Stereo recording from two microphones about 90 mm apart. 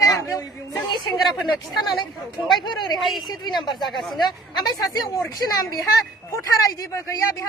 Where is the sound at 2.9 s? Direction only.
Centre (ahead or behind).